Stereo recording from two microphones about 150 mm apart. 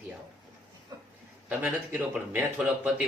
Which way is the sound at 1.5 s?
10° right (ahead or behind).